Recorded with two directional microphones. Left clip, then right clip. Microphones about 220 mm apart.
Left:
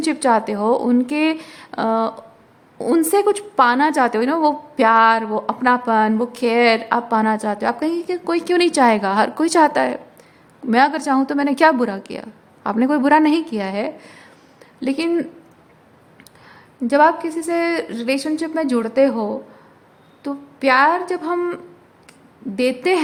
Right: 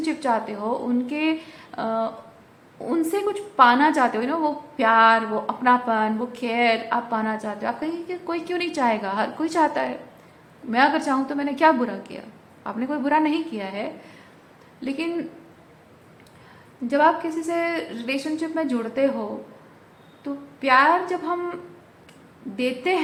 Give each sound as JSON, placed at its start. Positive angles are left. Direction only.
{"t": 0.0, "sound": "a woman's voice", "side_deg": 45}
{"t": 16.8, "sound": "a woman's voice", "side_deg": 45}